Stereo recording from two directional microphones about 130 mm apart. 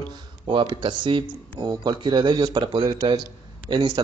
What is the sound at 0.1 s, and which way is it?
Speech, 35° right (ahead or behind).